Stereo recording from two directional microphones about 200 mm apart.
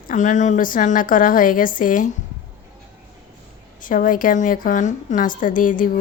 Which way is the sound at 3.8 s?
40° left (ahead or behind).